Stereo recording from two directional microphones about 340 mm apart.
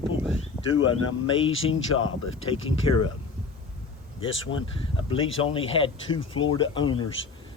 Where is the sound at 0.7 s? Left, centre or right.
Left.